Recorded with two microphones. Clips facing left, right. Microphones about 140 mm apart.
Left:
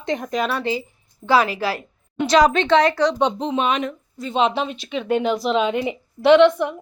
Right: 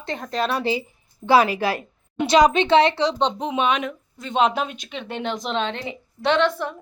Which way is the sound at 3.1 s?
Centre (ahead or behind).